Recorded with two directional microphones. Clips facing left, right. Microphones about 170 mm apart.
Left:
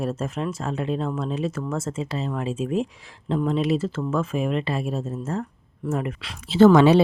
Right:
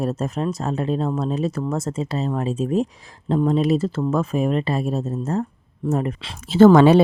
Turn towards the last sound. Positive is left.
turn(degrees=-50)  # may be behind; listen again after turning